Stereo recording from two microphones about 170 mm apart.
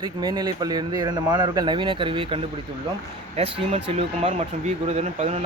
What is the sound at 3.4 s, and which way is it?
Speech, 35° right (ahead or behind).